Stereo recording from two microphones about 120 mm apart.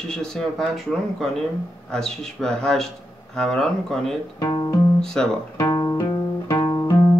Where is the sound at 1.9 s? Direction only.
5° left (ahead or behind).